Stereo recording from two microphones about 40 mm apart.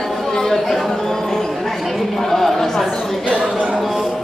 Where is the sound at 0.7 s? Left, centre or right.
Centre.